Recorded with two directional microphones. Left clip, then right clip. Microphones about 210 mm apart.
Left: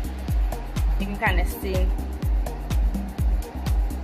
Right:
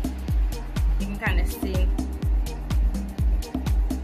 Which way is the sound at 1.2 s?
10° right (ahead or behind).